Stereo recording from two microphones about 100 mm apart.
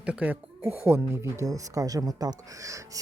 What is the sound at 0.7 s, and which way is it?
Speech, 25° right (ahead or behind).